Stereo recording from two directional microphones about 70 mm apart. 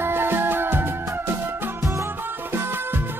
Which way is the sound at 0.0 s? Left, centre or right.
Right.